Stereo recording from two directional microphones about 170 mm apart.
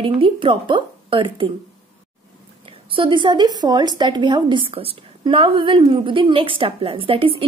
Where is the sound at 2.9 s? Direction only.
30° right (ahead or behind).